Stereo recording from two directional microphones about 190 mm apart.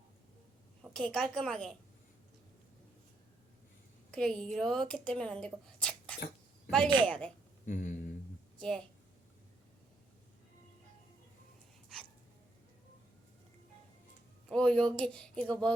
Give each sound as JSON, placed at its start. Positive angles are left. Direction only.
{"t": 0.8, "sound": "a woman's voice", "side_deg": 5}
{"t": 4.1, "sound": "a woman's voice", "side_deg": 5}
{"t": 7.6, "sound": "speech", "side_deg": 40}
{"t": 8.5, "sound": "a woman's voice", "side_deg": 5}
{"t": 14.5, "sound": "a woman's voice", "side_deg": 5}